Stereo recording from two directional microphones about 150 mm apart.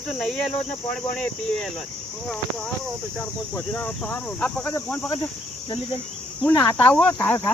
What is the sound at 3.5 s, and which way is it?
Speech, 10° left (ahead or behind).